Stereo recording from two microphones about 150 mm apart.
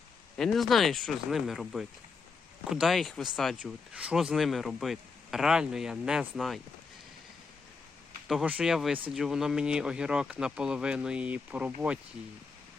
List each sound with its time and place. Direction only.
0.3 s speech: centre (ahead or behind)
8.3 s speech: 5° right (ahead or behind)